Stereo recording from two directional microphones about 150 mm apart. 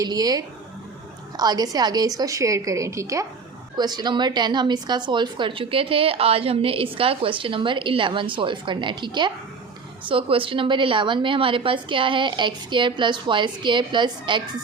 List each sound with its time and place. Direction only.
0.0 s a woman's voice: 25° right (ahead or behind)